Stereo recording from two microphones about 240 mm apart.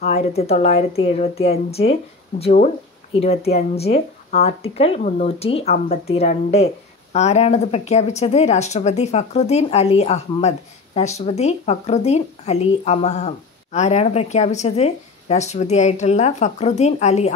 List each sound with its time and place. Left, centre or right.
0.0 s speech: left